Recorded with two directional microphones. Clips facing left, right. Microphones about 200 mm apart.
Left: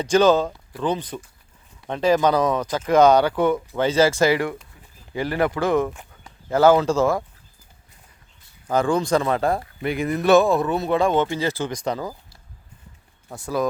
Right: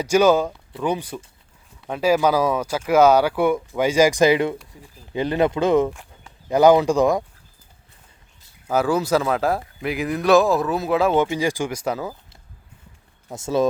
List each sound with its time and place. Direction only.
0.0 s speech: 10° right (ahead or behind)
5.9 s a sound: centre (ahead or behind)
6.5 s speech: 15° right (ahead or behind)
8.6 s speech: 5° right (ahead or behind)
13.3 s speech: 25° right (ahead or behind)